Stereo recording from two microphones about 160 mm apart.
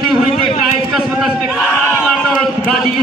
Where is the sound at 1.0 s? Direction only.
5° right (ahead or behind).